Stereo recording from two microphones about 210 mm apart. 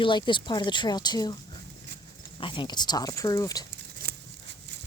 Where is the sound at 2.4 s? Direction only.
25° left (ahead or behind).